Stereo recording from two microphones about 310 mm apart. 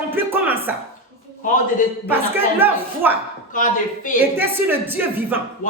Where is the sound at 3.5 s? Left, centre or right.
Left.